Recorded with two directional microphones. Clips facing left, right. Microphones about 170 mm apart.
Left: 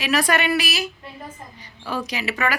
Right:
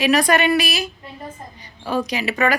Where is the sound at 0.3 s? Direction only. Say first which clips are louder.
Right 2 dB; 25° right (ahead or behind).